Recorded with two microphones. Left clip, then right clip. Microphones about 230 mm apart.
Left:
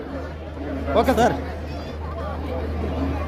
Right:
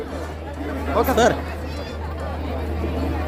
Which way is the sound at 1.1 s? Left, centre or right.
Centre.